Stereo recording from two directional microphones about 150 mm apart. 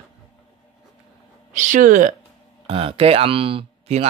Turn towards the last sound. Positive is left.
turn(degrees=-40)  # may be behind; listen again after turning